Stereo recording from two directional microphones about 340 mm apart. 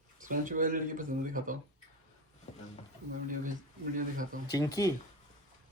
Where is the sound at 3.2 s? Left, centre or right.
Right.